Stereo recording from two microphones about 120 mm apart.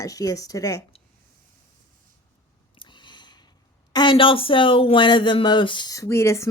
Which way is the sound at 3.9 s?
40° left (ahead or behind).